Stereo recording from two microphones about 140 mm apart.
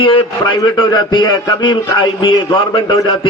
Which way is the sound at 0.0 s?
35° left (ahead or behind).